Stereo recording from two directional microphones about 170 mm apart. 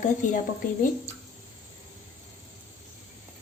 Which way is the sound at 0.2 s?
50° left (ahead or behind).